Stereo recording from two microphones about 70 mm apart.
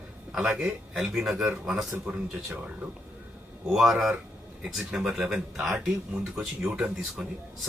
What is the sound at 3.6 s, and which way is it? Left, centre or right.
Speech, centre.